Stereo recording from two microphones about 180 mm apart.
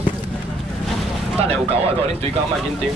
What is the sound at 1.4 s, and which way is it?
Speech, 35° right (ahead or behind).